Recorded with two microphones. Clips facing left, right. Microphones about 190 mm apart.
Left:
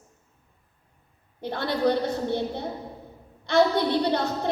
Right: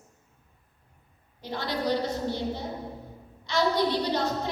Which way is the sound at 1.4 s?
55° left (ahead or behind).